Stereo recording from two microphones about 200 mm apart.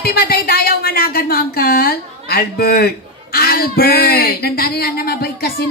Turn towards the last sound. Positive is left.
turn(degrees=50)  # may be behind; listen again after turning